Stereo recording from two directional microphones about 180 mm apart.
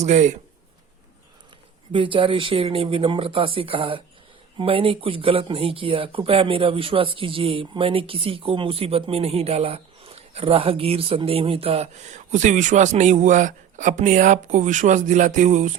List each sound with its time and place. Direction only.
0.0 s speech: 40° right (ahead or behind)
1.9 s speech: 30° right (ahead or behind)